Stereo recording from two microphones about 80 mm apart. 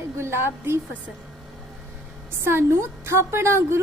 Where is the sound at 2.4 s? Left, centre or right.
Right.